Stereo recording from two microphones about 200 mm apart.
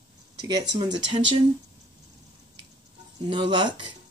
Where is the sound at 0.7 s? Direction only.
20° right (ahead or behind).